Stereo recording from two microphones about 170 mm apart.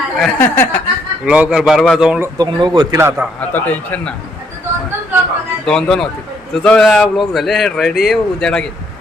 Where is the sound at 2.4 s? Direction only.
25° right (ahead or behind).